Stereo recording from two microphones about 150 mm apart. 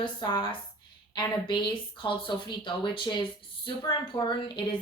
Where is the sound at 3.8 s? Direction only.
30° left (ahead or behind).